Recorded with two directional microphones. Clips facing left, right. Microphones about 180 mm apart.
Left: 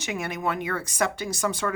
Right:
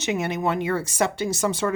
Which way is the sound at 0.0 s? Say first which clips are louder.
Right 5 dB; 25° right (ahead or behind).